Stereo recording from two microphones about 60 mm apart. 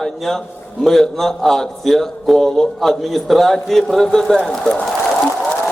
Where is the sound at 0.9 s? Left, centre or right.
Centre.